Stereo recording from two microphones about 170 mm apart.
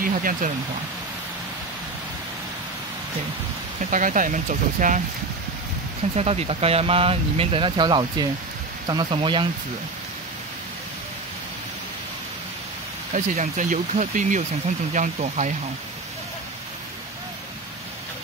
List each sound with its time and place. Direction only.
0.0 s speech: 55° right (ahead or behind)
3.9 s speech: 50° right (ahead or behind)
6.1 s speech: 40° right (ahead or behind)
13.1 s speech: 50° right (ahead or behind)